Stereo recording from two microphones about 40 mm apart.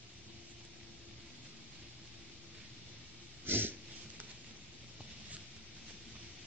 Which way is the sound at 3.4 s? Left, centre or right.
Right.